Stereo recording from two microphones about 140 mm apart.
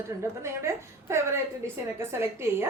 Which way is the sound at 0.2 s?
20° right (ahead or behind).